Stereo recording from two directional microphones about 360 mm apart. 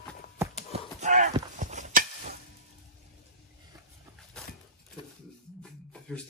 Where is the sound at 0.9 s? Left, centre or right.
Centre.